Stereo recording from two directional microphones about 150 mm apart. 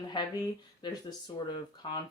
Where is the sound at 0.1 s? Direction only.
30° left (ahead or behind).